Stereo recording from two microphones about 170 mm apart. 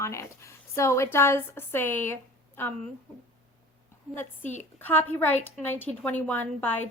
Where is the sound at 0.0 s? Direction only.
15° left (ahead or behind).